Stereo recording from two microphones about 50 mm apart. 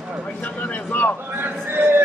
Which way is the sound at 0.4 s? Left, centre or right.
Left.